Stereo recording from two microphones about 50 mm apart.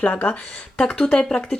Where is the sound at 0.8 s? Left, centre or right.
Centre.